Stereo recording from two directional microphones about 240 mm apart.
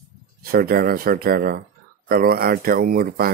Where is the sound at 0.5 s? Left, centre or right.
Right.